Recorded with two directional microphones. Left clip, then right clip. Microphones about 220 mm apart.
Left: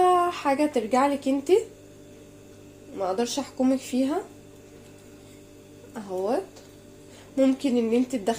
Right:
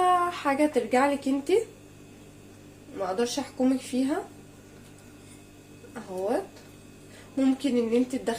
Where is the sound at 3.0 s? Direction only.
25° left (ahead or behind).